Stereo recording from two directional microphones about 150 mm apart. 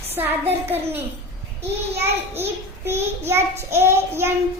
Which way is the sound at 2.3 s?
15° right (ahead or behind).